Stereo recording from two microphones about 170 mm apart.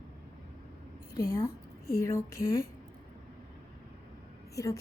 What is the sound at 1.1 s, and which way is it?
A woman's voice, 20° left (ahead or behind).